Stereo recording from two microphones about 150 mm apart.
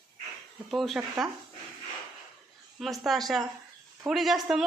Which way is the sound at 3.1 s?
Centre (ahead or behind).